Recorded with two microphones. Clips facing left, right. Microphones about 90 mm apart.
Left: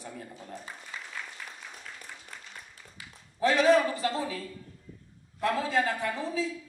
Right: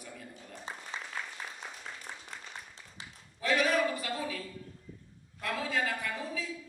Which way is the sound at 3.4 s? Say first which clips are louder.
Left 6 dB; 30° left (ahead or behind).